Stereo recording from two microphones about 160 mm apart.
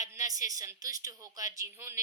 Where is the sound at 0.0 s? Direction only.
20° right (ahead or behind).